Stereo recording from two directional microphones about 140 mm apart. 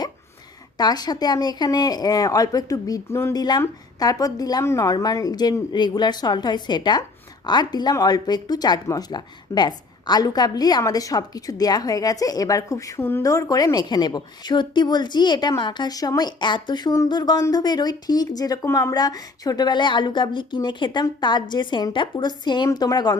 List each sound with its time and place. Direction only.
0.8 s a woman's voice: 30° left (ahead or behind)